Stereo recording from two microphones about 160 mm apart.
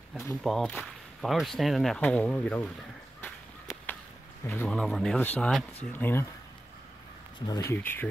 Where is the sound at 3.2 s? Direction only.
10° left (ahead or behind).